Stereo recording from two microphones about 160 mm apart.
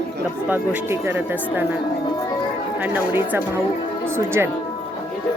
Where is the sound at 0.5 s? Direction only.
10° right (ahead or behind).